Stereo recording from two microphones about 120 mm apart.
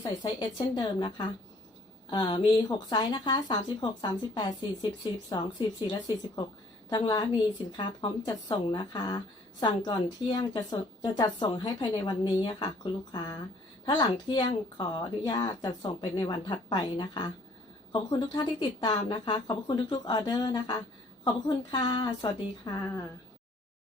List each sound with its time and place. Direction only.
0.0 s a woman's voice: 40° left (ahead or behind)
7.8 s a woman's voice: 40° left (ahead or behind)
22.8 s speech: 25° left (ahead or behind)